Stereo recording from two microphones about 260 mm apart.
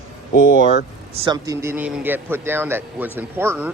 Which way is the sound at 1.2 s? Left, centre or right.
Centre.